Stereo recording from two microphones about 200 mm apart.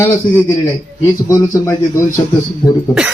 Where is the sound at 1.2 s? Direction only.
15° left (ahead or behind).